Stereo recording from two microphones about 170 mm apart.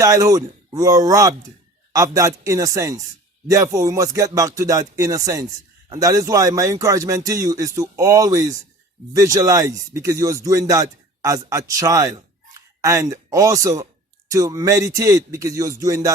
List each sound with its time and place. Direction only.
0.0 s speech: 20° right (ahead or behind)